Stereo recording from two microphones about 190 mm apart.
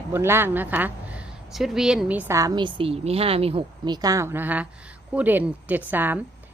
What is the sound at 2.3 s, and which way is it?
A woman's voice, 20° right (ahead or behind).